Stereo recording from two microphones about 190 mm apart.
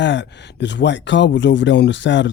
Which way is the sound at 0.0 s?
70° left (ahead or behind).